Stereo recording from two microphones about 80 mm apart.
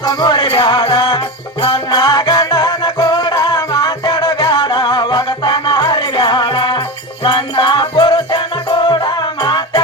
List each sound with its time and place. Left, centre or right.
0.0 s music: left
2.0 s music: left
2.5 s music: left
4.1 s music: left
5.7 s music: left